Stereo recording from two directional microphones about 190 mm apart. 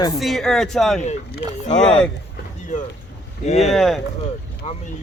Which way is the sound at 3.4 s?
35° left (ahead or behind).